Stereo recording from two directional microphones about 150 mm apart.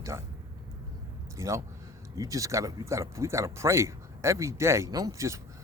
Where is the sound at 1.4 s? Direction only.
20° right (ahead or behind).